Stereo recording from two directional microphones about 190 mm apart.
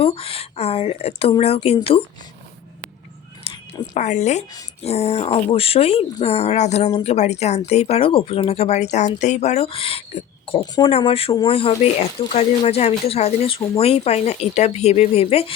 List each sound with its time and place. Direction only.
0.0 s speech: 30° left (ahead or behind)
3.4 s a sound: 25° left (ahead or behind)
3.9 s speech: 35° left (ahead or behind)